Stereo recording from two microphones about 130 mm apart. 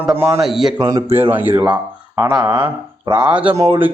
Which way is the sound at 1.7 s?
30° right (ahead or behind).